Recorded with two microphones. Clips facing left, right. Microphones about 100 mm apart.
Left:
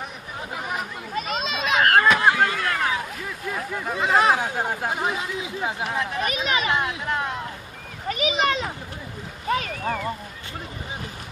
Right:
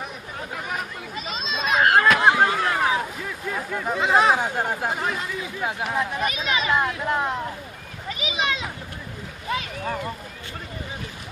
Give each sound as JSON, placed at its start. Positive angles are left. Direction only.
{"t": 0.5, "sound": "chatter", "side_deg": 5}
{"t": 1.1, "sound": "a sound", "side_deg": 55}
{"t": 2.1, "sound": "chop", "side_deg": -15}
{"t": 3.2, "sound": "a sound", "side_deg": 5}
{"t": 3.9, "sound": "speech", "side_deg": 0}
{"t": 4.9, "sound": "speech", "side_deg": 10}
{"t": 5.6, "sound": "speech", "side_deg": 0}
{"t": 6.1, "sound": "speech", "side_deg": -30}
{"t": 8.0, "sound": "a child's voice", "side_deg": 50}